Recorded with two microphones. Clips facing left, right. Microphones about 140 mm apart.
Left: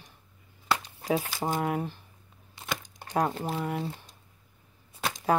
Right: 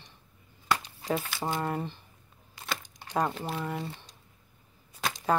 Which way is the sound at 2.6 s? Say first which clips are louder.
Even; 25° left (ahead or behind).